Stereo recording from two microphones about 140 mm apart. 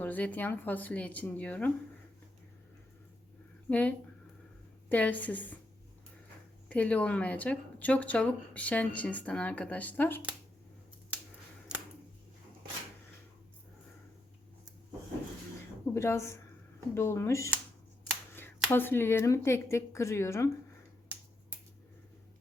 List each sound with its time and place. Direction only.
0.0 s speech: 10° left (ahead or behind)
3.7 s speech: 10° left (ahead or behind)
6.7 s speech: 10° left (ahead or behind)
11.7 s a sound: 5° right (ahead or behind)
16.0 s speech: 20° left (ahead or behind)
18.7 s speech: 15° left (ahead or behind)
21.1 s finger snapping: 10° right (ahead or behind)